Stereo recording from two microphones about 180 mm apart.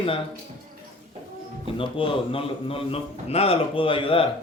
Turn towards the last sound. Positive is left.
turn(degrees=30)  # may be behind; listen again after turning